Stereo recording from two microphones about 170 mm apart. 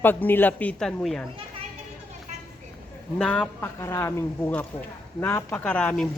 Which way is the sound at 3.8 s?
15° left (ahead or behind).